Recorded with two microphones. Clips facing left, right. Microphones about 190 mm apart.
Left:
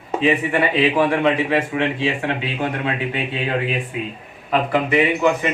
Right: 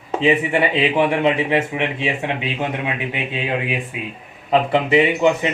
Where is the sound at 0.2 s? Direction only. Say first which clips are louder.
Right 1 dB; 20° right (ahead or behind).